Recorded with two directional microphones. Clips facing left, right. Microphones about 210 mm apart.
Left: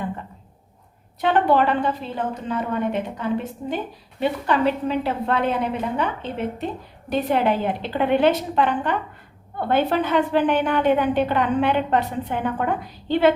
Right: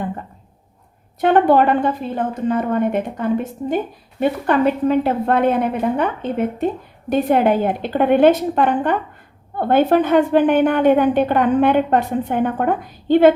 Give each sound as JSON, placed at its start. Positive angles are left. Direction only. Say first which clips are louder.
{"t": 1.2, "sound": "a woman's voice", "louder": "right 5 dB", "side_deg": -50}